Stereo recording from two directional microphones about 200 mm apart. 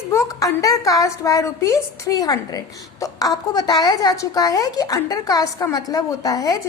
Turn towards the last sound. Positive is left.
turn(degrees=15)  # may be behind; listen again after turning